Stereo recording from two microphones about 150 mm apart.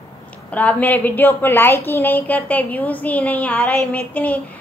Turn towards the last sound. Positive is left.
turn(degrees=10)  # may be behind; listen again after turning